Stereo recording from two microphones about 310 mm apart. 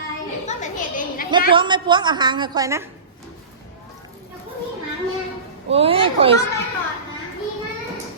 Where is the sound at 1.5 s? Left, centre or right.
Centre.